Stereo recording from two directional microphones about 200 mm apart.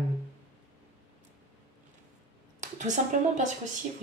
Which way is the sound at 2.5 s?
40° right (ahead or behind).